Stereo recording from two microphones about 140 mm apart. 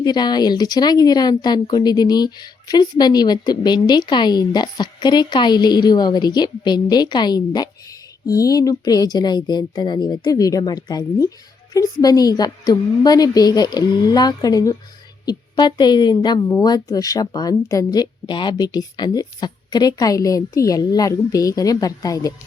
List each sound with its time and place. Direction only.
0.0 s speech: 30° left (ahead or behind)